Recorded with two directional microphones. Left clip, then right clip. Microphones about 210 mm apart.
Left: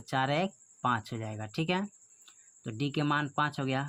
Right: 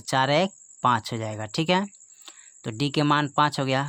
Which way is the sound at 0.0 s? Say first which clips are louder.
Right 8 dB; 35° right (ahead or behind).